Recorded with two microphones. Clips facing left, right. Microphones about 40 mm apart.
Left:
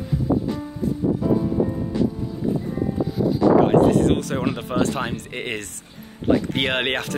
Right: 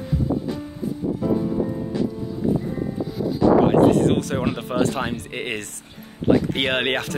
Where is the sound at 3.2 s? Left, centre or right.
Centre.